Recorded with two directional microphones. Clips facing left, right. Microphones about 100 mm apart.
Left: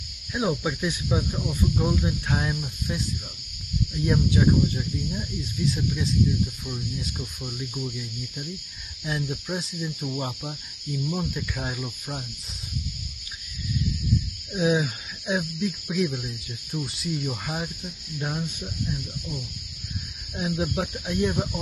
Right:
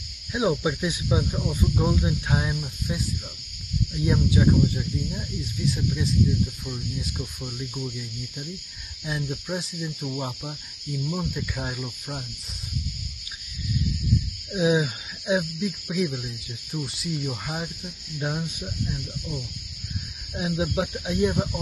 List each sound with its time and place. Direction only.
0.3 s speech: 10° right (ahead or behind)
9.0 s speech: centre (ahead or behind)
14.5 s speech: 15° right (ahead or behind)
15.6 s speech: centre (ahead or behind)
18.2 s speech: 15° right (ahead or behind)
20.3 s speech: 10° right (ahead or behind)